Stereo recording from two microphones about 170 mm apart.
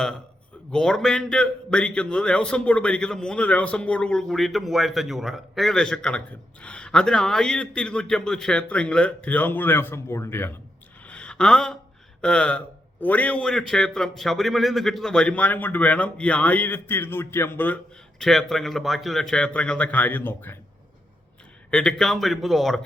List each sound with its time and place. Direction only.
0.7 s a man's voice: 5° left (ahead or behind)
11.0 s a sound: 5° left (ahead or behind)
12.2 s a man's voice: 5° left (ahead or behind)
18.2 s a man's voice: centre (ahead or behind)
21.7 s a man's voice: 5° left (ahead or behind)